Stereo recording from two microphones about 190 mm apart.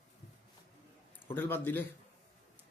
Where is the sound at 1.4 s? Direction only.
10° left (ahead or behind).